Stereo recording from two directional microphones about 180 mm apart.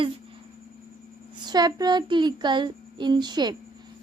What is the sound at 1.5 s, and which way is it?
A woman's voice, 20° right (ahead or behind).